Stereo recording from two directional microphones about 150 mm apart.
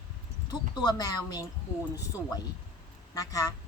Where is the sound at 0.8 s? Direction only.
25° left (ahead or behind).